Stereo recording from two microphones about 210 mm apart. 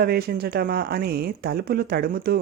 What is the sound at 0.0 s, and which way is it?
Speech, 45° right (ahead or behind).